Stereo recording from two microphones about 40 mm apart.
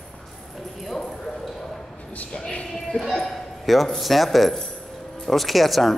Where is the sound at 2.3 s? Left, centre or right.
Left.